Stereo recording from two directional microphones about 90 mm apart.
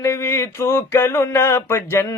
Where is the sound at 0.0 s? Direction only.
30° left (ahead or behind).